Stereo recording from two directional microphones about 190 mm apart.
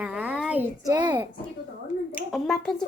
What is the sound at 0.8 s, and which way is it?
Speech, 20° right (ahead or behind).